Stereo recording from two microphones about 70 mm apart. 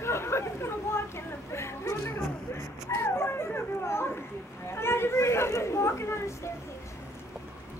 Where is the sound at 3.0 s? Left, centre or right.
Left.